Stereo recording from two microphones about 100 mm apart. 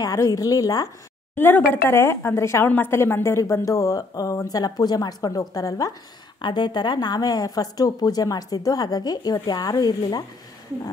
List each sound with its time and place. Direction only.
0.0 s a woman's voice: 40° left (ahead or behind)
1.3 s a woman's voice: 20° left (ahead or behind)
6.4 s a woman's voice: 45° left (ahead or behind)